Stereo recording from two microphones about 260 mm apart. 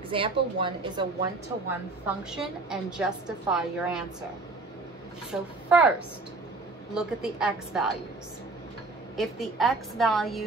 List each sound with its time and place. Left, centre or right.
0.1 s a woman's voice: centre
2.0 s a woman's voice: centre
5.3 s a woman's voice: centre
9.1 s a woman's voice: centre